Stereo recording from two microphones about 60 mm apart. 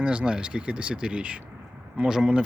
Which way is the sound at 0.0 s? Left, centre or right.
Centre.